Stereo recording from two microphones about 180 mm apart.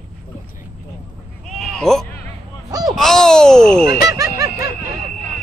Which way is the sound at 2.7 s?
20° right (ahead or behind).